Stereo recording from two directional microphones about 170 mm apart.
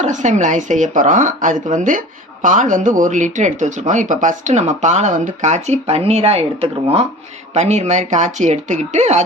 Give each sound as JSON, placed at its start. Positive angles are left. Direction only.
{"t": 0.0, "sound": "speech", "side_deg": -45}